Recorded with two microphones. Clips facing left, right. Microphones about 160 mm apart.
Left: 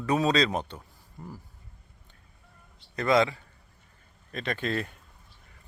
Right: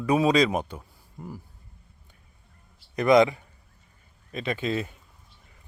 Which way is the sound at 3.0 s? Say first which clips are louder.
Right 5 dB; 15° right (ahead or behind).